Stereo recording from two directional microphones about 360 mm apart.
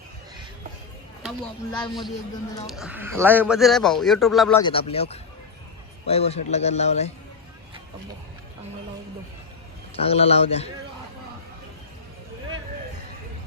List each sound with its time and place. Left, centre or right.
2.6 s speech: centre
4.6 s a man's voice: centre
9.9 s a man's voice: centre